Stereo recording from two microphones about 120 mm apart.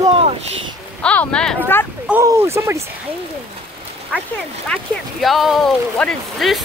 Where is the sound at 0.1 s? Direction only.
50° right (ahead or behind).